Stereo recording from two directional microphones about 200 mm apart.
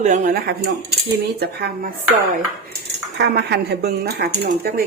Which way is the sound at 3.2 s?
55° right (ahead or behind).